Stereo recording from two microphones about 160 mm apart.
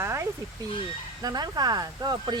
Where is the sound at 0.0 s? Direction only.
15° right (ahead or behind).